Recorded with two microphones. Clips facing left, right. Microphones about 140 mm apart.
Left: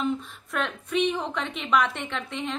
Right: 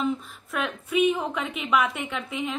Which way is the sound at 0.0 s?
Centre (ahead or behind).